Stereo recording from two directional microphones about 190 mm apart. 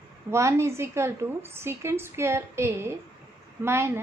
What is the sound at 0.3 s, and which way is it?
A woman's voice, 15° right (ahead or behind).